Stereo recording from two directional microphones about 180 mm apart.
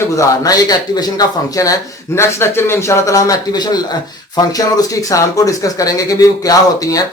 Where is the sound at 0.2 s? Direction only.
20° left (ahead or behind).